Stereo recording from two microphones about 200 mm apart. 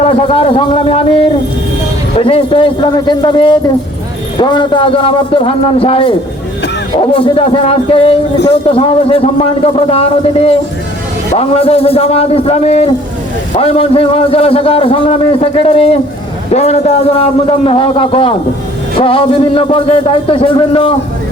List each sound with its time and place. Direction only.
0.0 s a man's voice: 30° left (ahead or behind)